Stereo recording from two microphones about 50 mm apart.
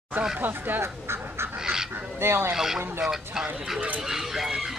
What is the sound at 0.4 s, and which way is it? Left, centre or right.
Speech, right.